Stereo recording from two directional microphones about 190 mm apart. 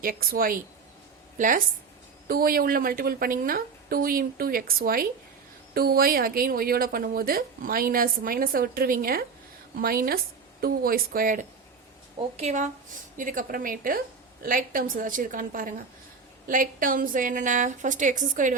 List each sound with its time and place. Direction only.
0.0 s speech: 50° right (ahead or behind)
12.4 s speech: 40° right (ahead or behind)